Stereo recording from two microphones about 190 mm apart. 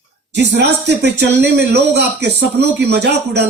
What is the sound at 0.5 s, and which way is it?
Speech, 65° right (ahead or behind).